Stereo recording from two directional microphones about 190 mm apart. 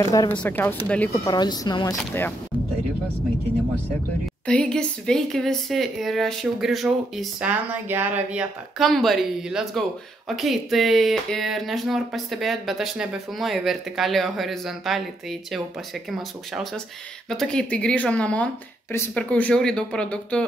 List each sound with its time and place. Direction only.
0.3 s speech: 10° left (ahead or behind)
1.2 s speech: 20° left (ahead or behind)
4.5 s speech: 5° left (ahead or behind)
16.1 s speech: centre (ahead or behind)